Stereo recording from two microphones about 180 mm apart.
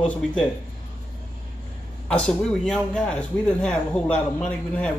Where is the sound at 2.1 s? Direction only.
5° left (ahead or behind).